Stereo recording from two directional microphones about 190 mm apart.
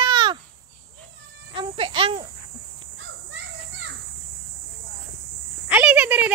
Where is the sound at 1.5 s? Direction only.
30° right (ahead or behind).